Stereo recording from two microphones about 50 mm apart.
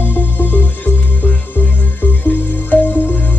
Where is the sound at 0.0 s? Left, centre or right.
Left.